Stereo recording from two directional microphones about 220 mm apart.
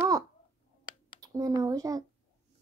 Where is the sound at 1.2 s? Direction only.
15° right (ahead or behind).